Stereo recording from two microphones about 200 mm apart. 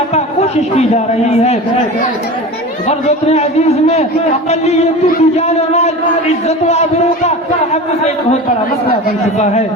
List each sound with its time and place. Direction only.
0.1 s a man's voice: 35° left (ahead or behind)
3.2 s a man's voice: 30° left (ahead or behind)